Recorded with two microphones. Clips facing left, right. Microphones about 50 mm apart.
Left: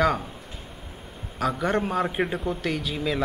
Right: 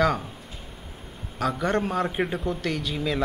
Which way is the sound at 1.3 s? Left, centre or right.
Centre.